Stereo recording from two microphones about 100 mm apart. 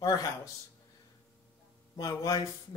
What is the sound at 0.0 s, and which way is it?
Speech, 40° left (ahead or behind).